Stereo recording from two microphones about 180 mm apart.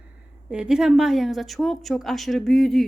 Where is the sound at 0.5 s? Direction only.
5° right (ahead or behind).